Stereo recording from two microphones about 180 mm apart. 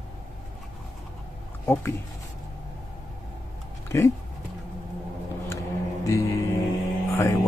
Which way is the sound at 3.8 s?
15° left (ahead or behind).